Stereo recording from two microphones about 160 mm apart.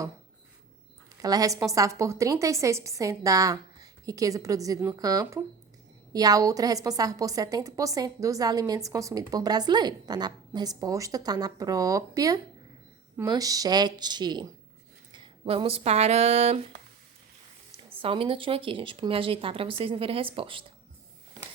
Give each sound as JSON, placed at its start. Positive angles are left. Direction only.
{"t": 1.2, "sound": "a woman's voice", "side_deg": -20}
{"t": 18.0, "sound": "speech", "side_deg": -35}